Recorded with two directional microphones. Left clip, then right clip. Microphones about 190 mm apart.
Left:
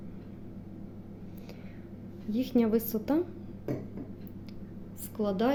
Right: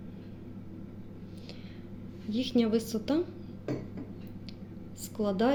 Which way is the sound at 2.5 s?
5° left (ahead or behind).